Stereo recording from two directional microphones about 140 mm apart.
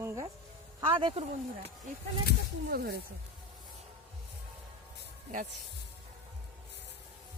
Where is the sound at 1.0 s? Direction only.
35° right (ahead or behind).